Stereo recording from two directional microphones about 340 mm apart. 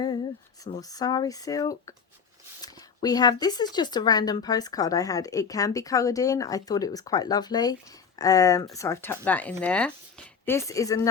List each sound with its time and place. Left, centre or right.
0.6 s speech: centre